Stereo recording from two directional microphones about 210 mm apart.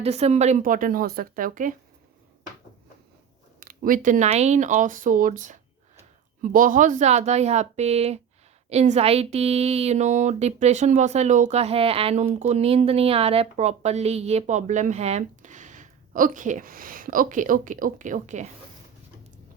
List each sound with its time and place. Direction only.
0.0 s a woman's voice: 30° right (ahead or behind)
3.6 s a woman's voice: 40° right (ahead or behind)